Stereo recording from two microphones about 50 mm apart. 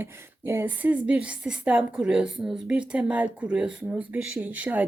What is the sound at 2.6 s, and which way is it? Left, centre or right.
Speech, right.